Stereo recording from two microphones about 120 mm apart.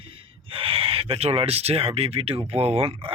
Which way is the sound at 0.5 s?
50° right (ahead or behind).